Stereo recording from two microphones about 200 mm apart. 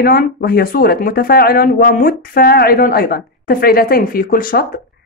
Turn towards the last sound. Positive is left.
turn(degrees=45)  # may be behind; listen again after turning